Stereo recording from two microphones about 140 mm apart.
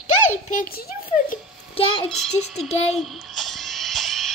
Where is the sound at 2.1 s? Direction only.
Centre (ahead or behind).